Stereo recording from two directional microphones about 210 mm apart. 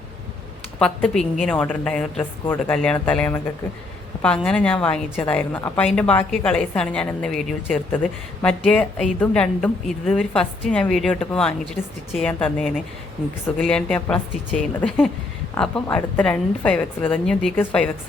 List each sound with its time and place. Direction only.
0.8 s a woman's voice: 5° left (ahead or behind)